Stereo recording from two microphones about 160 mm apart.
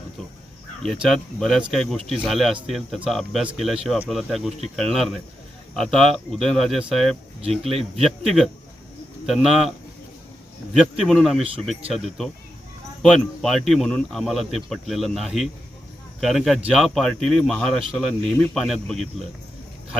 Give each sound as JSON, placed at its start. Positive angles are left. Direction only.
{"t": 0.9, "sound": "speech", "side_deg": 0}
{"t": 7.6, "sound": "speech", "side_deg": -40}
{"t": 8.0, "sound": "speech", "side_deg": 0}
{"t": 10.8, "sound": "speech", "side_deg": 0}